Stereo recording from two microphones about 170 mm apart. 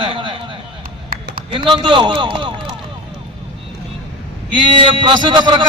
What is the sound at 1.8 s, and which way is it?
Speech, 30° right (ahead or behind).